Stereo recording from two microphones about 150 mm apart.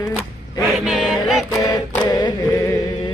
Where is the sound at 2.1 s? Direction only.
25° left (ahead or behind).